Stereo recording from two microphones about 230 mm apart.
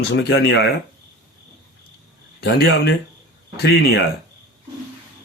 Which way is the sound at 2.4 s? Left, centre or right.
Left.